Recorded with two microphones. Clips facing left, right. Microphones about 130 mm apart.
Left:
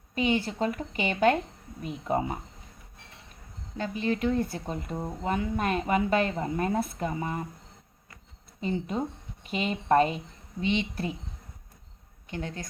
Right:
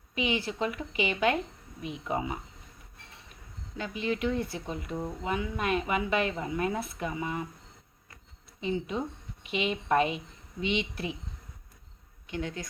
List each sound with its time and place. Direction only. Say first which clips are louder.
0.1 s speech: left 4 dB; 40° left (ahead or behind)
3.8 s speech: left 3 dB; 40° left (ahead or behind)
8.6 s speech: left 1 dB; 45° left (ahead or behind)
12.3 s speech: right 1 dB; 40° left (ahead or behind)